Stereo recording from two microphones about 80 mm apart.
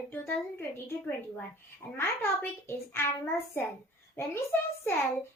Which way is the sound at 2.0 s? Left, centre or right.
Left.